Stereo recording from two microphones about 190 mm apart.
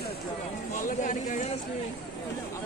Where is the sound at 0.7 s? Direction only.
40° left (ahead or behind).